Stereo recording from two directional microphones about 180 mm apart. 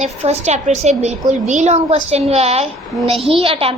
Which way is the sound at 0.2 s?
35° right (ahead or behind).